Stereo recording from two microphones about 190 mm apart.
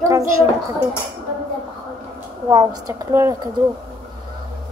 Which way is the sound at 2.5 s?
20° right (ahead or behind).